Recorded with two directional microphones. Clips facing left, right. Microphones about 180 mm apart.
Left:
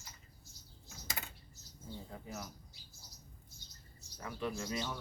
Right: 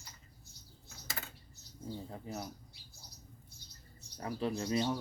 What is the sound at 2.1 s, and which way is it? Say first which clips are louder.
Bird: right 3 dB; 30° right (ahead or behind).